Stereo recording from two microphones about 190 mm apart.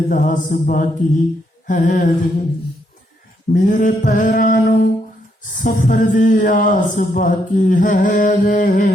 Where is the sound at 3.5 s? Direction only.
45° left (ahead or behind).